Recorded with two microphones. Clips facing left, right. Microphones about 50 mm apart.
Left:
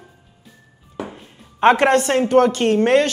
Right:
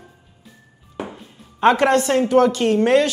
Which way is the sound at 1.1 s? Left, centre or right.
Left.